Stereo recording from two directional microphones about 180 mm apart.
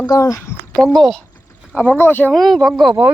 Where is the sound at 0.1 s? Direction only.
20° left (ahead or behind).